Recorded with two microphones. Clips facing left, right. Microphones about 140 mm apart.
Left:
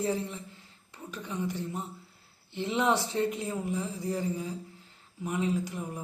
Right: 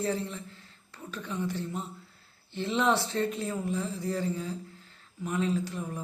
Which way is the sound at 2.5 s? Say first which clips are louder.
Right 1 dB; 15° left (ahead or behind).